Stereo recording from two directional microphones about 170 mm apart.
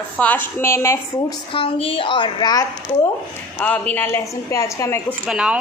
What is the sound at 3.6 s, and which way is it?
A woman's voice, 10° left (ahead or behind).